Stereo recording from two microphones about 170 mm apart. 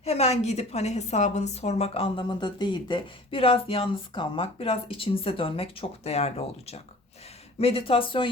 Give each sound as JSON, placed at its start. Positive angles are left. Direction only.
{"t": 0.0, "sound": "a woman's voice", "side_deg": 40}